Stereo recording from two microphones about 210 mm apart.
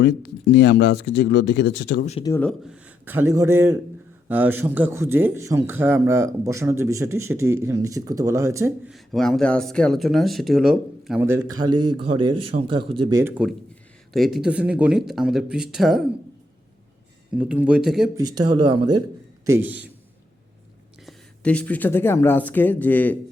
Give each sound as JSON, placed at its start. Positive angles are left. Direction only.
{"t": 0.0, "sound": "speech", "side_deg": 55}
{"t": 2.2, "sound": "speech", "side_deg": 10}
{"t": 8.9, "sound": "speech", "side_deg": 0}
{"t": 13.1, "sound": "speech", "side_deg": -10}
{"t": 17.3, "sound": "speech", "side_deg": -5}
{"t": 18.3, "sound": "speech", "side_deg": -20}
{"t": 19.5, "sound": "speech", "side_deg": -10}
{"t": 21.1, "sound": "speech", "side_deg": 5}